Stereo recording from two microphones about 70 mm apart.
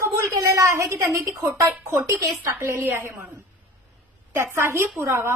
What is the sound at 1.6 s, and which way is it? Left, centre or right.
A woman's voice, right.